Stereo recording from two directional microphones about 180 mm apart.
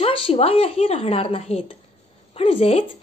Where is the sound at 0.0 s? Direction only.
35° left (ahead or behind).